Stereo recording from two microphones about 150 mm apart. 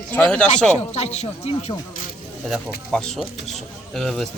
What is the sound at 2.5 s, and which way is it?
Speech, centre (ahead or behind).